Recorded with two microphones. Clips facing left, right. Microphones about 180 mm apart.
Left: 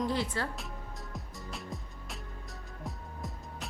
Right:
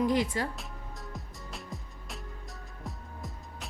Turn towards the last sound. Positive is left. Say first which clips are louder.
# left 1 dB
turn(degrees=0)  # may be behind; listen again after turning